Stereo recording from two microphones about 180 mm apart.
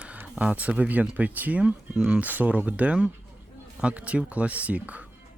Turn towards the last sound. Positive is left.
turn(degrees=-10)  # may be behind; listen again after turning